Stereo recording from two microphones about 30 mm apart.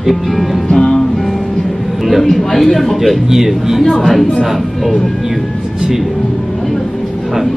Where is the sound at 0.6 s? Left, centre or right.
Centre.